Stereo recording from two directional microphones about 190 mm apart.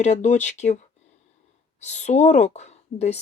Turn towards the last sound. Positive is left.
turn(degrees=35)  # may be behind; listen again after turning